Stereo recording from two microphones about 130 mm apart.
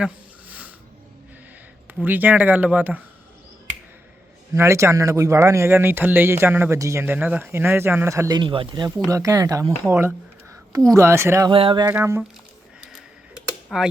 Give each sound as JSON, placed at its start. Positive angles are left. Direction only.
{"t": 0.0, "sound": "a sound", "side_deg": -10}
{"t": 1.9, "sound": "speech", "side_deg": -15}
{"t": 4.5, "sound": "speech", "side_deg": -20}
{"t": 8.4, "sound": "speech", "side_deg": -40}
{"t": 11.5, "sound": "music", "side_deg": -40}
{"t": 11.9, "sound": "speech", "side_deg": -20}
{"t": 12.8, "sound": "tick-tock", "side_deg": 0}